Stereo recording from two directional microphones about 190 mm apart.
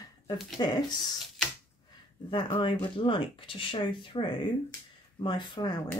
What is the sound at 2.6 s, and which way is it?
Speech, 25° left (ahead or behind).